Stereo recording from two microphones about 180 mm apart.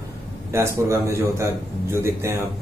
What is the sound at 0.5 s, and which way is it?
A man's voice, 15° right (ahead or behind).